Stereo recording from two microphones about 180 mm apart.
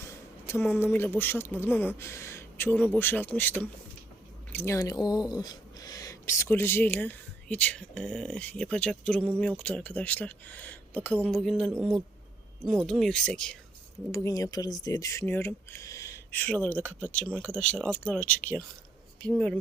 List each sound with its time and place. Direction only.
0.0 s speech: 15° left (ahead or behind)
14.1 s speech: 20° left (ahead or behind)